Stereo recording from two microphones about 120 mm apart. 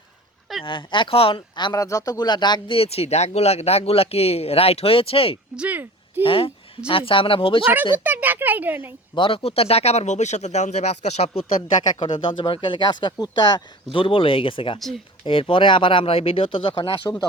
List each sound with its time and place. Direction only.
0.6 s speech: 45° left (ahead or behind)
5.5 s a sound: 15° right (ahead or behind)
6.2 s speech: 50° left (ahead or behind)
7.9 s a child's voice: 15° right (ahead or behind)
9.1 s speech: 50° left (ahead or behind); by 11.4 s 65° left (ahead or behind)
11.9 s speech: 45° left (ahead or behind)
13.9 s speech: 45° left (ahead or behind)
14.8 s speech: centre (ahead or behind)
15.2 s speech: 50° left (ahead or behind)